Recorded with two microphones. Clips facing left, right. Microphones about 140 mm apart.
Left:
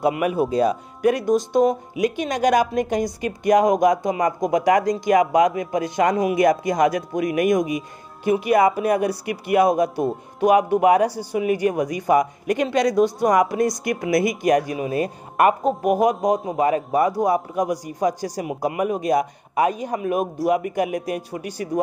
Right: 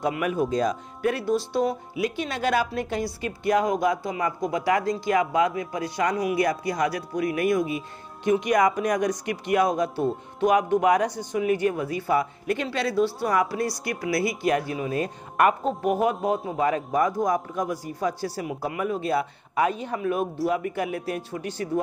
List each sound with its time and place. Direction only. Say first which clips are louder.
0.0 s a man's voice: left 5 dB; 10° left (ahead or behind)